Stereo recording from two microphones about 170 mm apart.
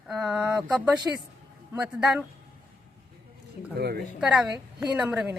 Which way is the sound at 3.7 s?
70° right (ahead or behind).